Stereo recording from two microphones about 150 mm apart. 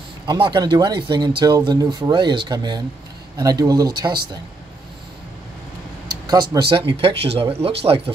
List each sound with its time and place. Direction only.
0.3 s speech: 30° right (ahead or behind)
6.2 s speech: 25° right (ahead or behind)
6.9 s speech: 40° right (ahead or behind)